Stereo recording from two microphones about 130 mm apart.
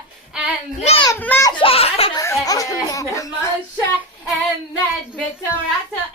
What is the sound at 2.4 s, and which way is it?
Speech, 25° left (ahead or behind).